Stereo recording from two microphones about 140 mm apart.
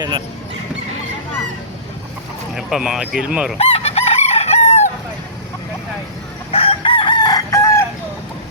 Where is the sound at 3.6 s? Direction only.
45° left (ahead or behind).